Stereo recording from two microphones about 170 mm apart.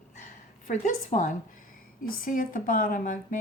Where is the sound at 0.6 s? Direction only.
50° left (ahead or behind).